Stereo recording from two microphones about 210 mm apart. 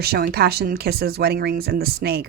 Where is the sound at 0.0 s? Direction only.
50° right (ahead or behind).